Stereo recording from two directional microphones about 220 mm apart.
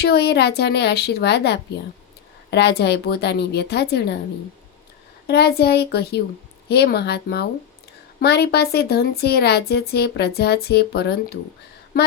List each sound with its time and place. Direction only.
0.0 s a woman's voice: 50° left (ahead or behind)
5.3 s a woman's voice: 45° left (ahead or behind)